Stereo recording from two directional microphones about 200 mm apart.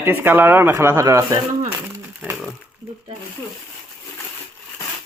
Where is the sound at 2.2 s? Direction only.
5° right (ahead or behind).